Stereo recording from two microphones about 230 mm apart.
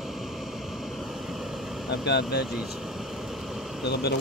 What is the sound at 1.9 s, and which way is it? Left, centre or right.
Speech, left.